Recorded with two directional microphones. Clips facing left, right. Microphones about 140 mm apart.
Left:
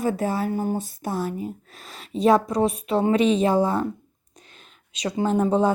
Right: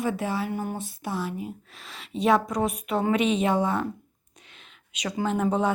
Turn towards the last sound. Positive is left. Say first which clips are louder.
# left 4 dB
turn(degrees=30)  # may be behind; listen again after turning